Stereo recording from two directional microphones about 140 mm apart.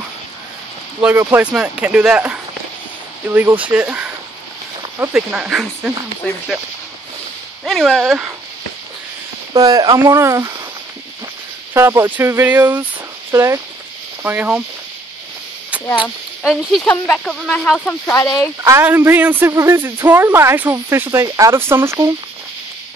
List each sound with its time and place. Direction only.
1.3 s speech: 10° right (ahead or behind)
5.1 s speech: 10° right (ahead or behind)
6.2 s speech: 10° left (ahead or behind)
7.6 s speech: centre (ahead or behind)
9.5 s speech: 25° right (ahead or behind)
11.7 s speech: 20° right (ahead or behind)
16.0 s speech: 5° right (ahead or behind)
16.8 s speech: 10° left (ahead or behind)
18.1 s speech: 25° left (ahead or behind)
18.6 s speech: 20° right (ahead or behind)